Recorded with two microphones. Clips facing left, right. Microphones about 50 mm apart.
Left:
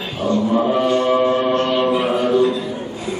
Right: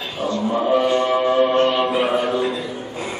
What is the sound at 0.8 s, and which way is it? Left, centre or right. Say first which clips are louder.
Music: left 2 dB; centre.